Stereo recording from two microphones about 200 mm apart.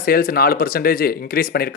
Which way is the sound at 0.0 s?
45° left (ahead or behind).